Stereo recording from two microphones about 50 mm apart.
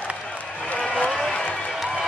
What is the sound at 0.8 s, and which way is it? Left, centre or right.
Vehicle, centre.